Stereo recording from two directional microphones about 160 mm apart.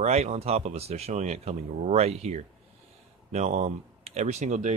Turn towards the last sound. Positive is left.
turn(degrees=-45)  # may be behind; listen again after turning